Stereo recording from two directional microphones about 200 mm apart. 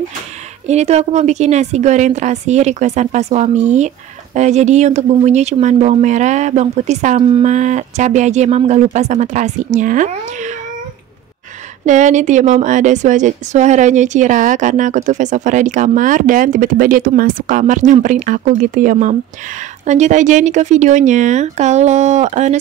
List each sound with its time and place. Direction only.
0.7 s a woman's voice: 35° right (ahead or behind)
11.8 s a woman's voice: 35° right (ahead or behind)